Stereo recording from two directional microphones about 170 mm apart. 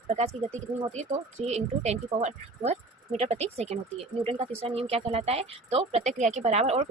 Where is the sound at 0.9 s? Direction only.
40° right (ahead or behind).